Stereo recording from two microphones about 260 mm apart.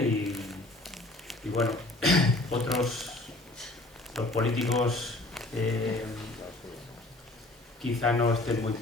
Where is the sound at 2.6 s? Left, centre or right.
Centre.